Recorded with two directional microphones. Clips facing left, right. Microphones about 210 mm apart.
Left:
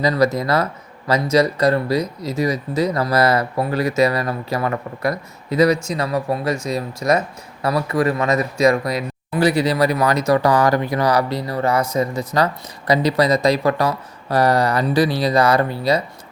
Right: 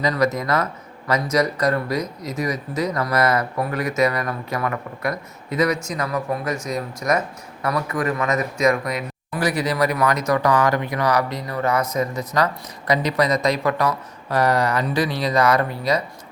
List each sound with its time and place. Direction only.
0.0 s speech: 30° left (ahead or behind)